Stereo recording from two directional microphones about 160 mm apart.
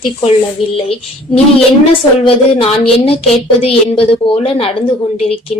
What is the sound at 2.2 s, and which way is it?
A woman's voice, 35° left (ahead or behind).